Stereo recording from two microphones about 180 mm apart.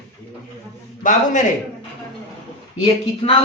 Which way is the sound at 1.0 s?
50° left (ahead or behind).